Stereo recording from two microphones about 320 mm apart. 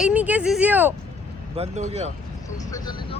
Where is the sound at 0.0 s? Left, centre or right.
Centre.